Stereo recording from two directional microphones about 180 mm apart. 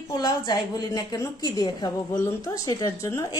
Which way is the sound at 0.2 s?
25° left (ahead or behind).